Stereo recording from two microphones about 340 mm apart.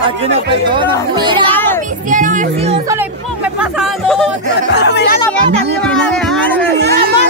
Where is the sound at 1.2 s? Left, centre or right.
Centre.